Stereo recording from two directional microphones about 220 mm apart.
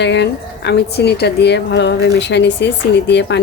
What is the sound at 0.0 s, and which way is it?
Speech, 50° left (ahead or behind).